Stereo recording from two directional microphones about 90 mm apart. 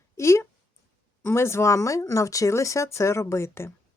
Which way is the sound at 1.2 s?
30° left (ahead or behind).